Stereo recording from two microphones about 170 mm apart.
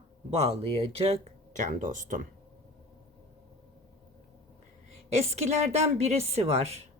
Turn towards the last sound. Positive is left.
turn(degrees=-40)  # may be behind; listen again after turning